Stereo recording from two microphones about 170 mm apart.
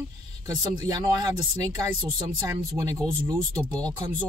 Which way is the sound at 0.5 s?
20° right (ahead or behind).